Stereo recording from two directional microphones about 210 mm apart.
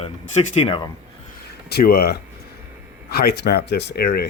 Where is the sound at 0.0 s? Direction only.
30° left (ahead or behind).